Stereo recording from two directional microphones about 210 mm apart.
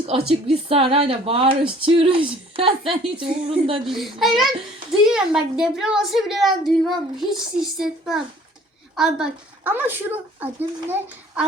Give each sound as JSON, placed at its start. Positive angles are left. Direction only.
{"t": 0.0, "sound": "a woman's voice", "side_deg": -25}
{"t": 3.9, "sound": "a woman's voice", "side_deg": 0}